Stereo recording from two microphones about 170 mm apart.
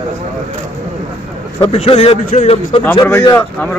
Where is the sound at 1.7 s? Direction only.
35° left (ahead or behind).